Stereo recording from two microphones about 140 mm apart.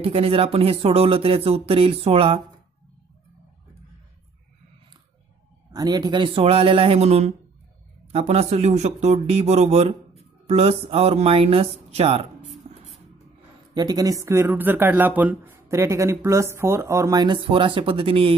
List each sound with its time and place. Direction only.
0.0 s speech: 45° right (ahead or behind)
5.7 s speech: 30° right (ahead or behind); by 12.3 s 45° right (ahead or behind)
13.7 s speech: 30° right (ahead or behind)